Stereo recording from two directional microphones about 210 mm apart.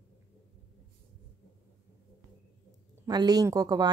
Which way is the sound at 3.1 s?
20° right (ahead or behind).